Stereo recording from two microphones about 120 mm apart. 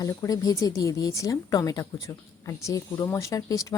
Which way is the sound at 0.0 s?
30° left (ahead or behind).